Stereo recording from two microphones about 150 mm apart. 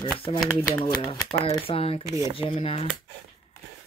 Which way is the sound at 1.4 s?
40° left (ahead or behind).